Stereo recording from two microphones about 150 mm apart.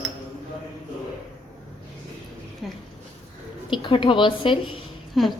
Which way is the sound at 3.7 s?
35° left (ahead or behind).